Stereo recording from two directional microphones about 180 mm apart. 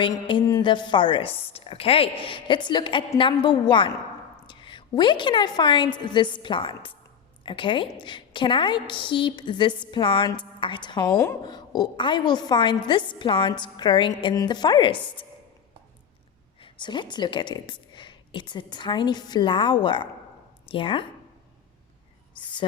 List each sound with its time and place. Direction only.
0.0 s a woman's voice: 25° left (ahead or behind)
16.6 s a woman's voice: 25° left (ahead or behind)